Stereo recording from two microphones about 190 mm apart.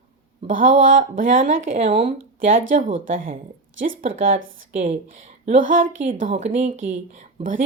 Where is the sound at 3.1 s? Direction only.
45° right (ahead or behind).